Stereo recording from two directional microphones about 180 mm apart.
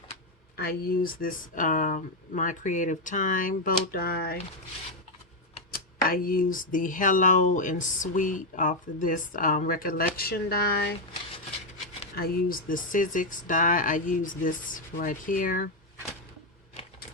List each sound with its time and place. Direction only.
0.5 s speech: 60° left (ahead or behind)
5.7 s speech: 55° left (ahead or behind)
12.1 s speech: 55° left (ahead or behind)